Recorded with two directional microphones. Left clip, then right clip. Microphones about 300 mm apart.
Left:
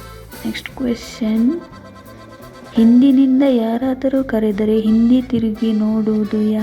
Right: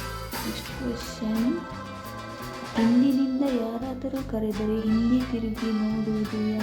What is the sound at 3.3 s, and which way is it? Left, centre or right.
Music, left.